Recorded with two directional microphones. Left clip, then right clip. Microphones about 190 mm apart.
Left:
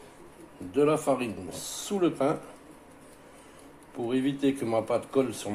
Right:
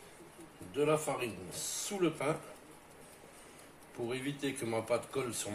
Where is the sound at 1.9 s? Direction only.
35° left (ahead or behind).